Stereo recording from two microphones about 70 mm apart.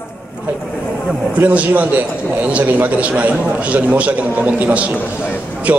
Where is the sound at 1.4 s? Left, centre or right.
Right.